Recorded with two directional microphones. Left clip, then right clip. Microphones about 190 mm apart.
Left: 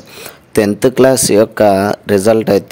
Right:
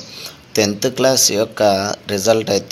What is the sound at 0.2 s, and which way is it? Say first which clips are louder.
Speech: left 4 dB; 50° left (ahead or behind).